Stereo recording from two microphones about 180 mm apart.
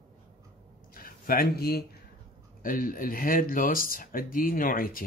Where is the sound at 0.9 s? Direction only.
55° left (ahead or behind).